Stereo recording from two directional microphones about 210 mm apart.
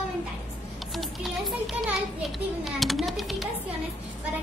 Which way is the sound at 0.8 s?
Centre (ahead or behind).